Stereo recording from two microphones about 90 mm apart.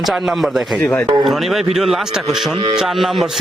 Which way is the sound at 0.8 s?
15° left (ahead or behind).